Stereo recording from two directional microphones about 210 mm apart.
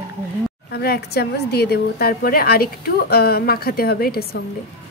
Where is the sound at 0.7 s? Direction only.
50° left (ahead or behind).